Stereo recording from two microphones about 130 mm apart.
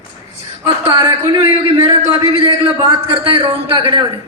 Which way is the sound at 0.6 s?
40° right (ahead or behind).